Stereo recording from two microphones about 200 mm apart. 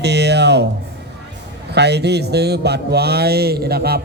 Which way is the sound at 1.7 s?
55° right (ahead or behind).